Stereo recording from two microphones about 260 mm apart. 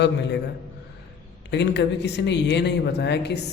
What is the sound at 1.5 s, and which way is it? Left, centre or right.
A man's voice, left.